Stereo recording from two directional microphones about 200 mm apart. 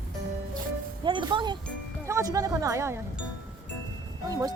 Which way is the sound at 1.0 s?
25° right (ahead or behind).